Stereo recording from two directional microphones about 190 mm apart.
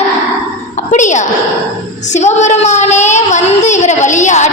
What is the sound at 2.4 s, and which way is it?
A woman's voice, 35° left (ahead or behind).